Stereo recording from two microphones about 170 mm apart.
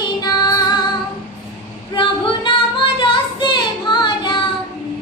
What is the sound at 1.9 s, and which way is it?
Female singing, 30° left (ahead or behind).